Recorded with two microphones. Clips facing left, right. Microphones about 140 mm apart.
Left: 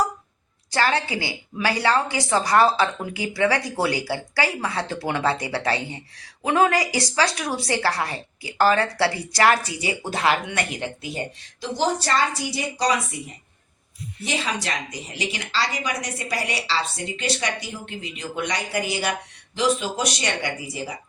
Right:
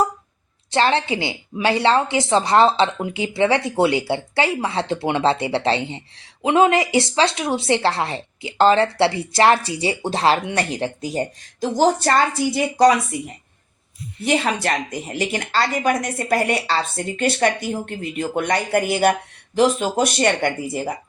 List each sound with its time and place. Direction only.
0.7 s a woman's voice: 25° right (ahead or behind); by 20.9 s 50° right (ahead or behind)